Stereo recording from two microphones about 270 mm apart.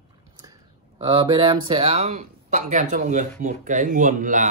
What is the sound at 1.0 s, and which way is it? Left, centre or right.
Speech, centre.